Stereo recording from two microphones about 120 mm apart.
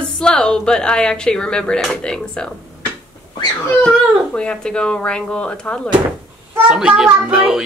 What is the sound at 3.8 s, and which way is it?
A woman's voice, 10° left (ahead or behind).